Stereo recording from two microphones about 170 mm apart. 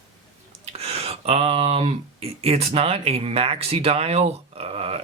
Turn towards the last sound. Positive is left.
turn(degrees=-35)  # may be behind; listen again after turning